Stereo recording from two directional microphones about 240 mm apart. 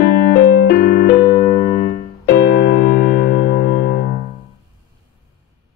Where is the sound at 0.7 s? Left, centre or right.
Left.